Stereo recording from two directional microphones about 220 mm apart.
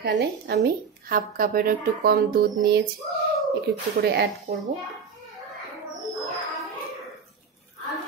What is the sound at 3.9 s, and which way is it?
Speech, 45° right (ahead or behind).